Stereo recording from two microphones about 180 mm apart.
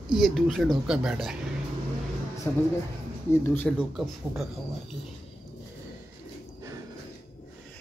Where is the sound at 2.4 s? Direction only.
15° left (ahead or behind).